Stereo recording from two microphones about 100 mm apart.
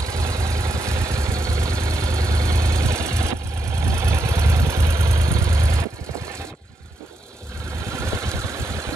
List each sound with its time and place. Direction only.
0.0 s vehicle: 35° right (ahead or behind)
7.9 s vehicle: 25° right (ahead or behind)